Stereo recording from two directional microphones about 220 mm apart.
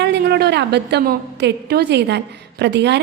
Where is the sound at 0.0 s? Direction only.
50° right (ahead or behind).